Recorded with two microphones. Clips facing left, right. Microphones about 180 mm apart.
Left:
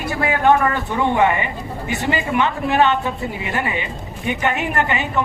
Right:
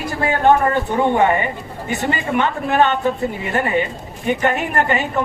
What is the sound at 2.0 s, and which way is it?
A woman's voice, 40° right (ahead or behind).